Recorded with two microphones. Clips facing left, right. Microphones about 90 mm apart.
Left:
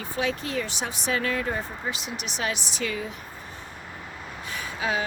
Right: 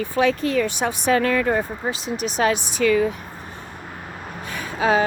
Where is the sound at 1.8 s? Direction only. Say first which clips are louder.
Right 7 dB; 35° right (ahead or behind).